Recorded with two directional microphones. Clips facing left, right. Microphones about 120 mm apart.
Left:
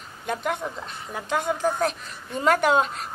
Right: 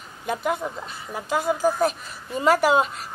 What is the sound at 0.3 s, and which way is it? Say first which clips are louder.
A woman's voice: right 2 dB; 5° right (ahead or behind).